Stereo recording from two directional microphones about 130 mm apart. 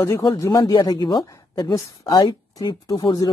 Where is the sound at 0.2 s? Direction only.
25° left (ahead or behind).